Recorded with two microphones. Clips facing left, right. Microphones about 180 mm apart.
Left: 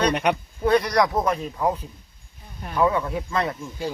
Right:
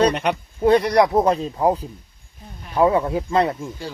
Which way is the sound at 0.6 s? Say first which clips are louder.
Right 4 dB; 30° right (ahead or behind).